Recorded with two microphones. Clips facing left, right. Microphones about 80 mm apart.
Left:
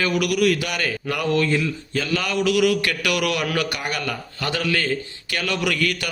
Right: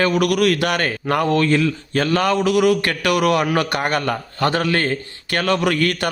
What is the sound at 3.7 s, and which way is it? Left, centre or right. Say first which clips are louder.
A man's voice: right 7 dB; right.